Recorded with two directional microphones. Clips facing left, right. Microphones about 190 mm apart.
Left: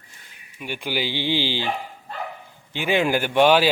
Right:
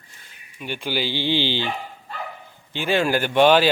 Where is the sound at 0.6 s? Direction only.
10° left (ahead or behind).